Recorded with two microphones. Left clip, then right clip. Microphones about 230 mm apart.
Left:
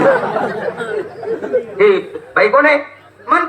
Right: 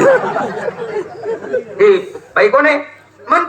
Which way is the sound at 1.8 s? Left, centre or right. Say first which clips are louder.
Right 2 dB; right.